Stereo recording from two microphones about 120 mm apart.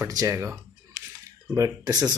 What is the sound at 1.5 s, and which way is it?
Speech, 30° right (ahead or behind).